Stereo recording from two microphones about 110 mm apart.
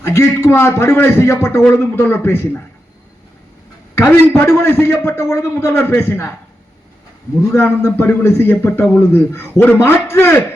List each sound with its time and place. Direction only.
0.0 s a man's voice: 20° left (ahead or behind)
3.9 s a woman's voice: 20° left (ahead or behind)
7.5 s a man's voice: 20° left (ahead or behind)